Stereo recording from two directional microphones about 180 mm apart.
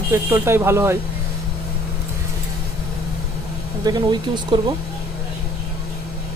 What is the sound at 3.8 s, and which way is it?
Speech, 20° right (ahead or behind).